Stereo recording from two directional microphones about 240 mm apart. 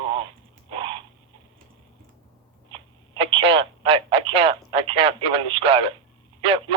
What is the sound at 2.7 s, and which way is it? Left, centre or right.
Telephone, right.